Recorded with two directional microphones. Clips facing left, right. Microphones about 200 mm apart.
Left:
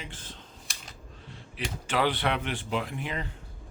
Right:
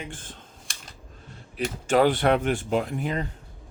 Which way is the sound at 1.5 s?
45° right (ahead or behind).